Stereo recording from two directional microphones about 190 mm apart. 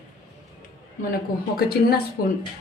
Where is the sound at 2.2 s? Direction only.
50° left (ahead or behind).